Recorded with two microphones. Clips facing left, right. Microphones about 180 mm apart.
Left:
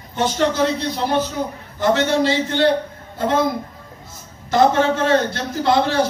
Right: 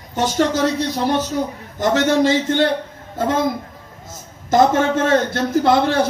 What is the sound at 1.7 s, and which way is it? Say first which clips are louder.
Speech: right 1 dB; 45° right (ahead or behind).